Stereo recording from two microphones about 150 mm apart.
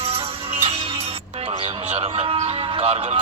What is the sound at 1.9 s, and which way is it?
Speech, 45° right (ahead or behind).